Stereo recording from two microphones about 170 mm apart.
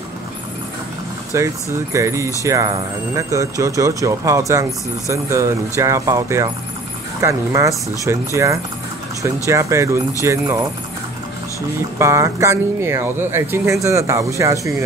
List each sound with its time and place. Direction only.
1.3 s speech: 15° right (ahead or behind)
12.0 s speech: 20° right (ahead or behind)